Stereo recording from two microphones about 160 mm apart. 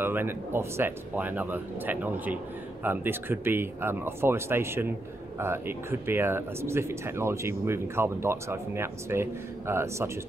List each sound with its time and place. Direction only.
0.0 s speech: 15° right (ahead or behind)